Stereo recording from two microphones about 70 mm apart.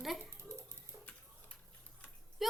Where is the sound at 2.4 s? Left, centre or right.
Centre.